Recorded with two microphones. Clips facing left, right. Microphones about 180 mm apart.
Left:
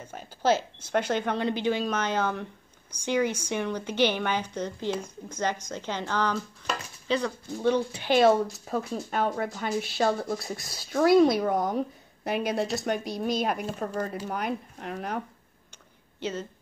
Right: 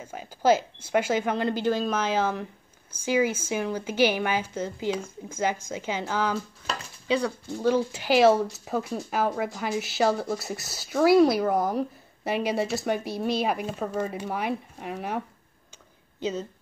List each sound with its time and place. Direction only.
0.0 s speech: 10° right (ahead or behind)